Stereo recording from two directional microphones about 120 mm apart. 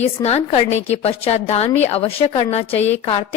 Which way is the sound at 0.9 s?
60° left (ahead or behind).